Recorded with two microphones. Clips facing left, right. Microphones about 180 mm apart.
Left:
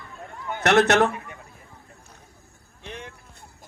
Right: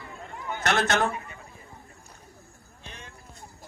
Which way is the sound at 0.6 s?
70° left (ahead or behind).